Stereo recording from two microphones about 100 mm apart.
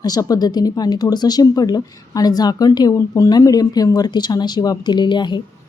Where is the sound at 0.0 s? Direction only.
40° left (ahead or behind).